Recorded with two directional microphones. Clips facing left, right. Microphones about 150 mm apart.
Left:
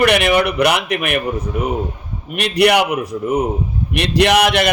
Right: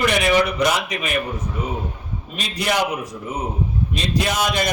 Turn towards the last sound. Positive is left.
turn(degrees=75)  # may be behind; listen again after turning